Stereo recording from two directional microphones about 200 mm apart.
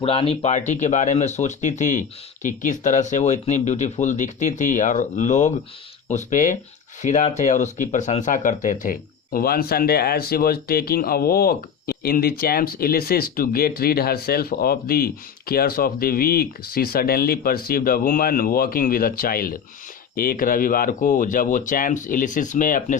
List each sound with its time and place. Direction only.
0.0 s speech: 30° left (ahead or behind)